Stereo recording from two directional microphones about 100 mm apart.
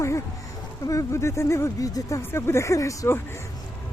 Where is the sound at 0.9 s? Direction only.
30° left (ahead or behind).